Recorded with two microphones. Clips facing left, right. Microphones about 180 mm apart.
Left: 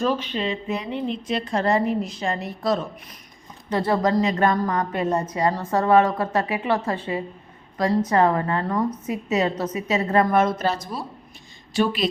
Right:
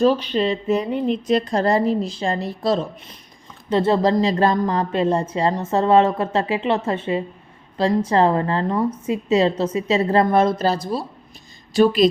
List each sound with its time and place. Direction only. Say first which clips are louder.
0.0 s a woman's voice: right 6 dB; 35° right (ahead or behind)